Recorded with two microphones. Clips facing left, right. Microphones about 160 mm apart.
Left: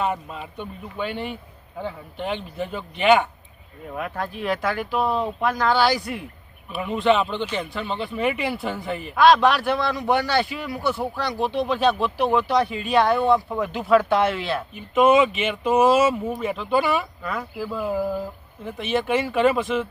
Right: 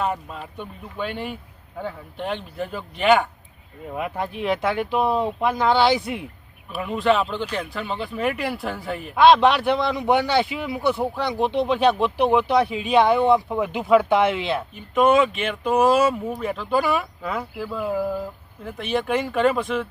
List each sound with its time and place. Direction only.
0.0 s speech: centre (ahead or behind)
3.9 s speech: 15° right (ahead or behind)
6.7 s speech: centre (ahead or behind)
9.1 s speech: 20° right (ahead or behind)
14.8 s speech: 5° left (ahead or behind)